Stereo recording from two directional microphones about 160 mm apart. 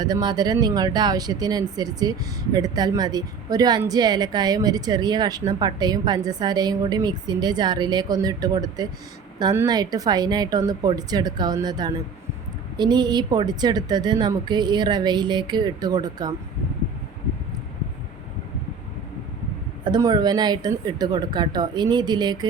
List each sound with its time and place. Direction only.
0.0 s speech: 25° right (ahead or behind)
19.8 s speech: 25° right (ahead or behind)